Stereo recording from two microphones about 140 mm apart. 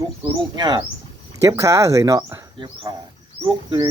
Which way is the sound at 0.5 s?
30° right (ahead or behind).